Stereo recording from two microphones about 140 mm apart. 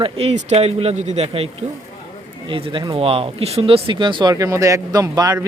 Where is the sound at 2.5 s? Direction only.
40° right (ahead or behind).